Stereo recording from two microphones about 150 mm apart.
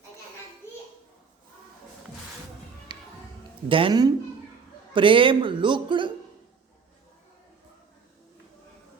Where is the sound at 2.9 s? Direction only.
30° right (ahead or behind).